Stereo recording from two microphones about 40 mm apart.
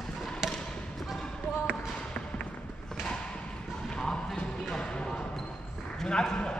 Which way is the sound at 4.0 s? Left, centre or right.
Centre.